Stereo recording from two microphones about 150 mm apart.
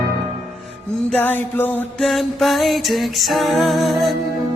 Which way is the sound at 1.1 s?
15° left (ahead or behind).